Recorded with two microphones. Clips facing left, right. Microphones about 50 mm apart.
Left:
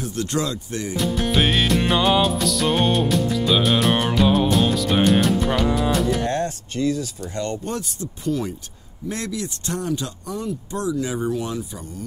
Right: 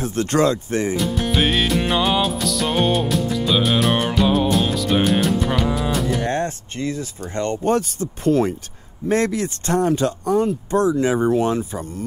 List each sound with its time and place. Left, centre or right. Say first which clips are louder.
0.0 s speech: right 6 dB; right
0.9 s music: right 1 dB; centre
6.2 s speech: right 1 dB; right